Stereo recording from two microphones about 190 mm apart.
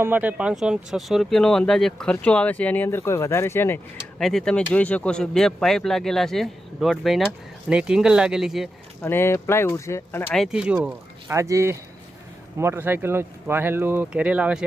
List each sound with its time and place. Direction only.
0.0 s speech: 10° right (ahead or behind); by 3.8 s 10° left (ahead or behind)
4.2 s speech: centre (ahead or behind)
9.0 s speech: 10° left (ahead or behind); by 14.6 s 5° right (ahead or behind)